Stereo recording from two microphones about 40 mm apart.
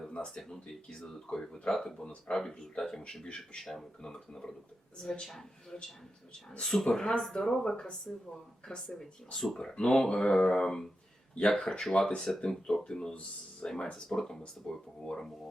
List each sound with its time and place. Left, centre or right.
0.1 s a sound: left
0.3 s speech: centre
3.6 s speech: centre
4.0 s speech: centre
9.6 s speech: left
14.1 s speech: centre